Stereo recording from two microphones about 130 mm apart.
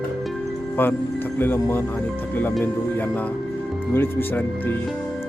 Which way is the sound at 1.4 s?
20° left (ahead or behind).